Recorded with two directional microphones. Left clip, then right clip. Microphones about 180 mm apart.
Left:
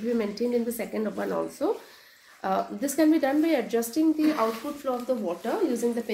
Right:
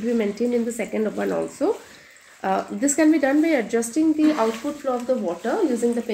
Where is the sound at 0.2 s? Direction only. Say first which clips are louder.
Right 4 dB; 40° right (ahead or behind).